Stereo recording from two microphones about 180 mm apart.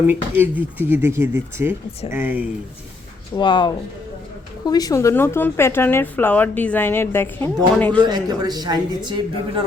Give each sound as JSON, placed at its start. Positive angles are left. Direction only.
{"t": 0.1, "sound": "speech", "side_deg": -10}
{"t": 3.3, "sound": "a woman's voice", "side_deg": 25}
{"t": 8.0, "sound": "a man's voice", "side_deg": -20}